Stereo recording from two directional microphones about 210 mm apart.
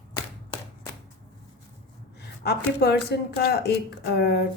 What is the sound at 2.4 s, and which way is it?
A woman's voice, 50° left (ahead or behind).